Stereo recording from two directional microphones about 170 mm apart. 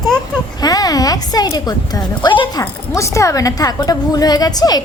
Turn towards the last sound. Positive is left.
turn(degrees=20)  # may be behind; listen again after turning